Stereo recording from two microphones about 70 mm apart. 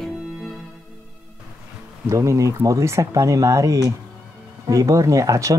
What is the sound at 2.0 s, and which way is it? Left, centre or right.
Speech, right.